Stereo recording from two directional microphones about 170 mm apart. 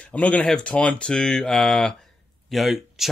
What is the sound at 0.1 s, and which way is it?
Speech, 5° left (ahead or behind).